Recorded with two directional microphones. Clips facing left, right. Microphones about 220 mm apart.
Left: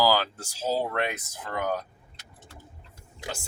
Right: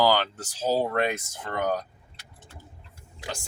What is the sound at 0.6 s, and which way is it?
Speech, 35° right (ahead or behind).